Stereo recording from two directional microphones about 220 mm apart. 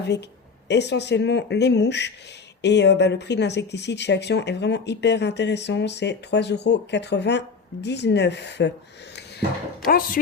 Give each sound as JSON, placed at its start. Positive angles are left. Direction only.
{"t": 0.7, "sound": "speech", "side_deg": 50}
{"t": 9.8, "sound": "speech", "side_deg": 40}